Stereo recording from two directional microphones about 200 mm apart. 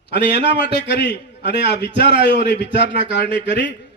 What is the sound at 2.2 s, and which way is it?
Speech, 60° left (ahead or behind).